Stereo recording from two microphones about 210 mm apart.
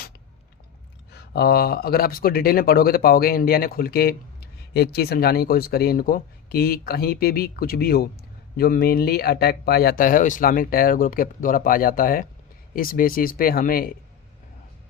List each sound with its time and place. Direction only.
1.1 s speech: 50° left (ahead or behind)